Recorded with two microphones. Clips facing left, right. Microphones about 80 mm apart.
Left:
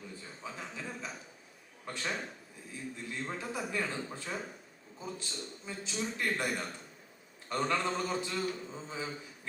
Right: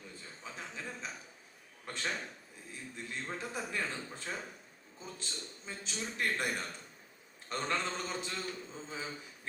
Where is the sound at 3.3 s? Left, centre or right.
Centre.